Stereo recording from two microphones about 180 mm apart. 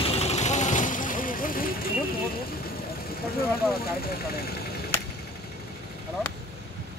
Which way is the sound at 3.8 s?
60° left (ahead or behind).